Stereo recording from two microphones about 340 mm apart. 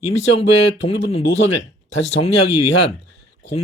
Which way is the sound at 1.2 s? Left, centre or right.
Left.